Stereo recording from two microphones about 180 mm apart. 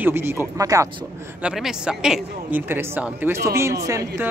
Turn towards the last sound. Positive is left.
turn(degrees=-15)  # may be behind; listen again after turning